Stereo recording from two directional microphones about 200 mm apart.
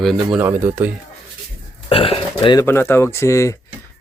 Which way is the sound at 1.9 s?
25° left (ahead or behind).